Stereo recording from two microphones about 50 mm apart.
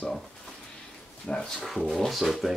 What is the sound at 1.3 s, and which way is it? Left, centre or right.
Speech, centre.